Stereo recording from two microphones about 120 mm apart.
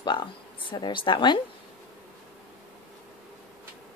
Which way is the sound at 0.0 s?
40° left (ahead or behind).